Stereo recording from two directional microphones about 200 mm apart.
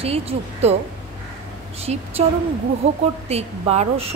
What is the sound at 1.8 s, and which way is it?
Speech, 30° right (ahead or behind).